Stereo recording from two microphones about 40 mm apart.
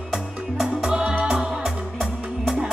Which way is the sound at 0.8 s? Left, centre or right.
Centre.